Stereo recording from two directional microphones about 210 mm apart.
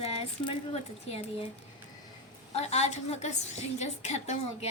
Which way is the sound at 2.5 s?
30° left (ahead or behind).